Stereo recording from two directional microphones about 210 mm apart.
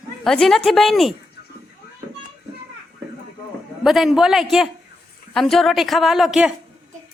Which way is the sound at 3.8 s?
Centre (ahead or behind).